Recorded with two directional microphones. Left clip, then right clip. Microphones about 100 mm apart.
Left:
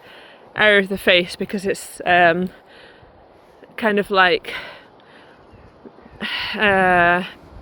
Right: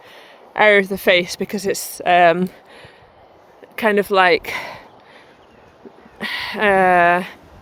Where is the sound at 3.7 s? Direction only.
65° right (ahead or behind).